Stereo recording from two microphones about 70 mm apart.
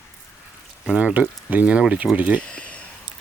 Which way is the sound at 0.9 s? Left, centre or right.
Centre.